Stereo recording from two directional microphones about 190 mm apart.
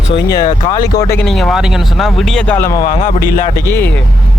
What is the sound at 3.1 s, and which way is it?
Speech, 45° left (ahead or behind).